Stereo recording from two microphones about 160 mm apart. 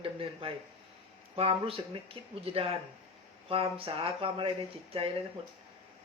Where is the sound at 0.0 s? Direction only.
35° right (ahead or behind).